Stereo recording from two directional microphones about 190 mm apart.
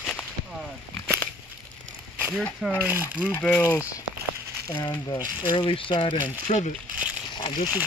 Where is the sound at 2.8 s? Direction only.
10° right (ahead or behind).